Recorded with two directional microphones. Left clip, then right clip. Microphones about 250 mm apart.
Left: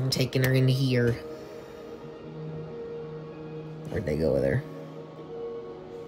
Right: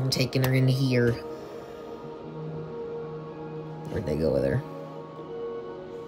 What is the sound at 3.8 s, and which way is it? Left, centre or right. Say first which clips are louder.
Music: even; centre.